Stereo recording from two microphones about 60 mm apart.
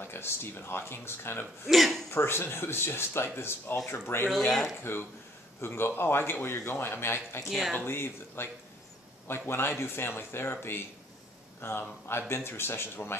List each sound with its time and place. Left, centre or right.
0.0 s a man's voice: left
1.7 s speech: centre
2.0 s a man's voice: left
4.5 s speech: centre
5.6 s a man's voice: left